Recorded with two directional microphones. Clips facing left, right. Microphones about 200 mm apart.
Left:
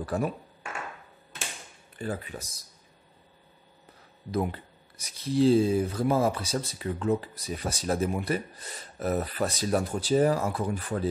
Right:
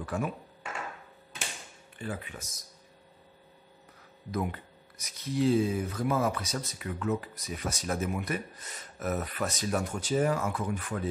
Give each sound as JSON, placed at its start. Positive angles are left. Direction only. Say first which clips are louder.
{"t": 0.0, "sound": "speech", "louder": "left 4 dB", "side_deg": 35}
{"t": 2.0, "sound": "speech", "louder": "left 4 dB", "side_deg": 40}
{"t": 4.3, "sound": "speech", "louder": "left 4 dB", "side_deg": 30}